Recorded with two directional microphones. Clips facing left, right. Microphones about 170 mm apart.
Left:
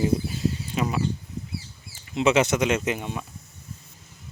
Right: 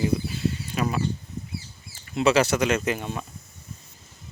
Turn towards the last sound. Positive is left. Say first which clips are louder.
# even
turn(degrees=15)  # may be behind; listen again after turning